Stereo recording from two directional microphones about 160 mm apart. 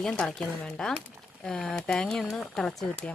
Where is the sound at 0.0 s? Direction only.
5° left (ahead or behind).